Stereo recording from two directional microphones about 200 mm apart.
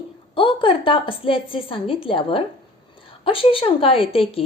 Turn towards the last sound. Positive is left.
turn(degrees=25)  # may be behind; listen again after turning